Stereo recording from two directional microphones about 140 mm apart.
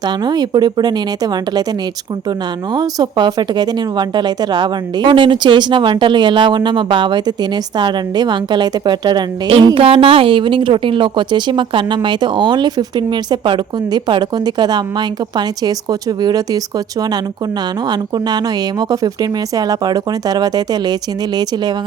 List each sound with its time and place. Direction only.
0.3 s speech: 30° right (ahead or behind)
2.7 s speech: 30° right (ahead or behind)
17.8 s speech: 30° right (ahead or behind)